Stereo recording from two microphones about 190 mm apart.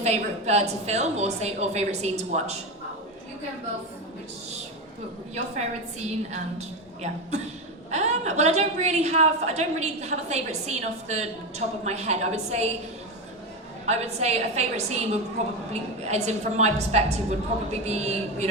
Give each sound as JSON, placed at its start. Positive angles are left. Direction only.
{"t": 0.0, "sound": "a woman's voice", "side_deg": -35}
{"t": 5.3, "sound": "a woman's voice", "side_deg": -35}
{"t": 13.8, "sound": "a woman's voice", "side_deg": -35}